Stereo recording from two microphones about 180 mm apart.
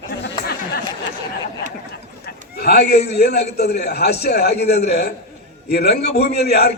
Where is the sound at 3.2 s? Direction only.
65° left (ahead or behind).